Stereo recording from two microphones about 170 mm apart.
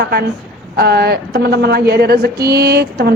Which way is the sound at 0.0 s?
70° right (ahead or behind).